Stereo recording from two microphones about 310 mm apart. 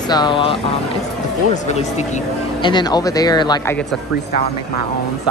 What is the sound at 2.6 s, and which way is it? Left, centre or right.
Speech, centre.